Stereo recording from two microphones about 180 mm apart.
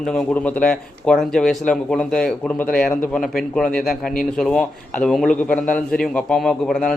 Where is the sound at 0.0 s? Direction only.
5° left (ahead or behind).